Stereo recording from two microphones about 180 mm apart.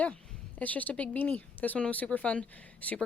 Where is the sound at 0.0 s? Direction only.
10° left (ahead or behind).